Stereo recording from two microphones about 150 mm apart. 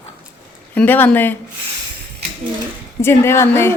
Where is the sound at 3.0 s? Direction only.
15° left (ahead or behind).